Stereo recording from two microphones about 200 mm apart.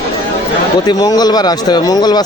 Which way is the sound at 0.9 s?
20° left (ahead or behind).